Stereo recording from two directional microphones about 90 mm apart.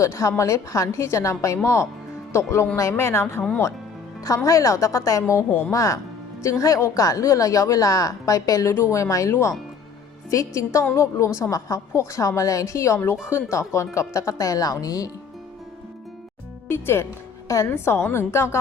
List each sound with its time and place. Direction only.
0.0 s a woman's voice: 35° left (ahead or behind)
4.4 s a woman's voice: 35° left (ahead or behind)
16.6 s a woman's voice: 25° left (ahead or behind)